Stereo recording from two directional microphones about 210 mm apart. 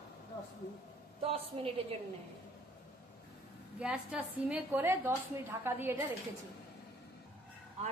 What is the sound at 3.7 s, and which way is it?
A woman's voice, 5° right (ahead or behind).